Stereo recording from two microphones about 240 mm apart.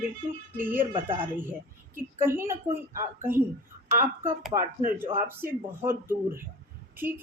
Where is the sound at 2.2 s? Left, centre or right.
Centre.